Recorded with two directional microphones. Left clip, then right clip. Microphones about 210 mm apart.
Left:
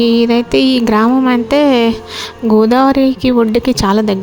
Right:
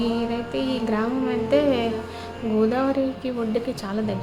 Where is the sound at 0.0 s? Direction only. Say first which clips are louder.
Left 14 dB; 45° left (ahead or behind).